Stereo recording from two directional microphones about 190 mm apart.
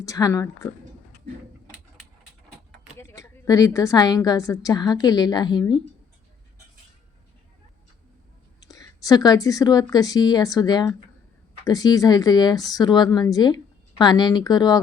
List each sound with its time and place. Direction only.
0.0 s speech: 20° left (ahead or behind)
3.0 s a woman's voice: 15° left (ahead or behind)
8.6 s a woman's voice: 20° left (ahead or behind)